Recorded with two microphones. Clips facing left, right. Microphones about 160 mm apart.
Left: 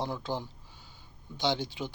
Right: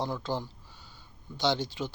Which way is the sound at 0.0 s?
15° left (ahead or behind).